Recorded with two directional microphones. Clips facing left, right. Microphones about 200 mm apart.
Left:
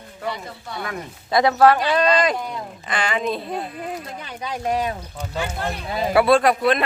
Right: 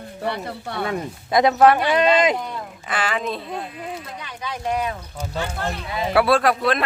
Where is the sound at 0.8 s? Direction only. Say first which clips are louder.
Right 5 dB; 25° right (ahead or behind).